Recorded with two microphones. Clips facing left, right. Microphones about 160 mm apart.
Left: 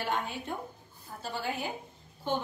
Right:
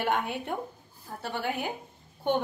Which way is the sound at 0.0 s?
60° right (ahead or behind).